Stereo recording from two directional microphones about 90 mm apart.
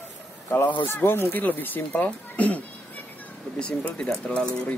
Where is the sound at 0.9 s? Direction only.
25° left (ahead or behind); by 4.7 s 10° left (ahead or behind).